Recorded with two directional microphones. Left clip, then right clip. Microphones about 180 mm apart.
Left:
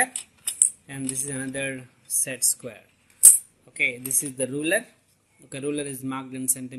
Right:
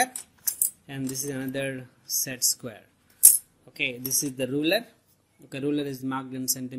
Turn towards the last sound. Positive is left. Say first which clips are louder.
# right 1 dB
turn(degrees=-35)  # may be behind; listen again after turning